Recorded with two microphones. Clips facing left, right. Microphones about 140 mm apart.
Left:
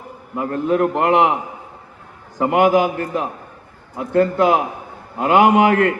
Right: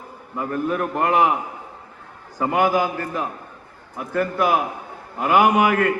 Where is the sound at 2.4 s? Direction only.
20° left (ahead or behind).